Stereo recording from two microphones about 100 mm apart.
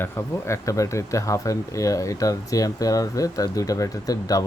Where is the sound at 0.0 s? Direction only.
30° left (ahead or behind).